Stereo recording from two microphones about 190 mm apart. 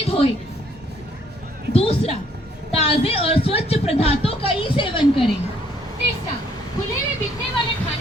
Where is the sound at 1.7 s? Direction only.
30° left (ahead or behind).